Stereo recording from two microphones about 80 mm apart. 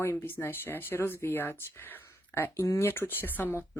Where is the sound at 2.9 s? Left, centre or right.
Left.